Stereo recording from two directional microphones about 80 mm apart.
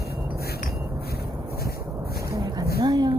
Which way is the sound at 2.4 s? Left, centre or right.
Right.